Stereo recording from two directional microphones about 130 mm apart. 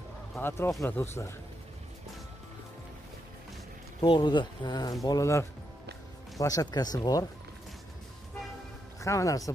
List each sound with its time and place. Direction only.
0.4 s speech: 20° left (ahead or behind)
4.0 s speech: 35° left (ahead or behind)
9.0 s speech: 25° left (ahead or behind)